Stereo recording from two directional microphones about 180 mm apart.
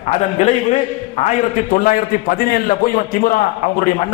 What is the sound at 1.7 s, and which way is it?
A man's voice, 50° left (ahead or behind).